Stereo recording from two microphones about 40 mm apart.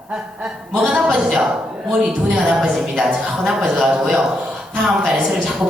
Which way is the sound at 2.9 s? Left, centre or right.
Centre.